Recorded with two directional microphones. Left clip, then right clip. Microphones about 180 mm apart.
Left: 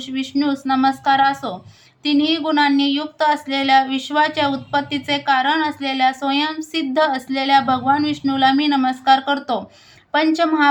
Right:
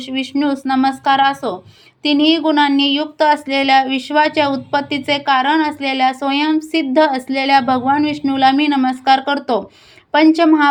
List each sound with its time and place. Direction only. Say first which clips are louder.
0.0 s speech: right 3 dB; 25° right (ahead or behind)